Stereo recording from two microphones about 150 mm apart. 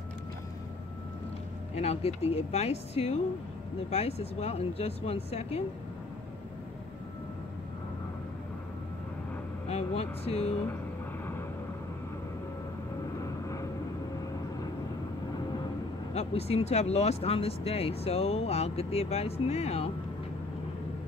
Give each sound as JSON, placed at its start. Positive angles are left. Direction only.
{"t": 1.8, "sound": "speech", "side_deg": 45}
{"t": 9.7, "sound": "speech", "side_deg": 45}
{"t": 13.2, "sound": "vehicle", "side_deg": 20}
{"t": 16.1, "sound": "speech", "side_deg": 45}